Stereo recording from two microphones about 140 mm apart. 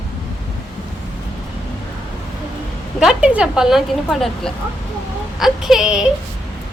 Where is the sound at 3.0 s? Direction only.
5° right (ahead or behind).